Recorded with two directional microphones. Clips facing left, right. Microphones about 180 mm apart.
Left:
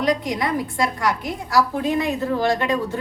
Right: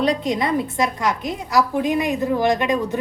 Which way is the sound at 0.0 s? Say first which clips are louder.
Right 2 dB; 25° right (ahead or behind).